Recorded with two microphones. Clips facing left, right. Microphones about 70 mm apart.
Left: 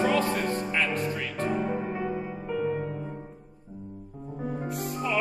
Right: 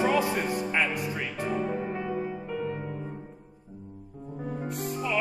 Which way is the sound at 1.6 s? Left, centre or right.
Centre.